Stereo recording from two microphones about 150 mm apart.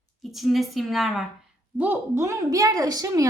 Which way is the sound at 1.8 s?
15° right (ahead or behind).